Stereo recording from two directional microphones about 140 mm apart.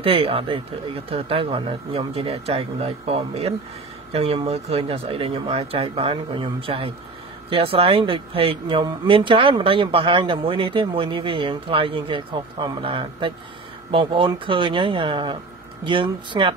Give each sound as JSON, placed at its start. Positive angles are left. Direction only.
{"t": 0.0, "sound": "speech", "side_deg": -40}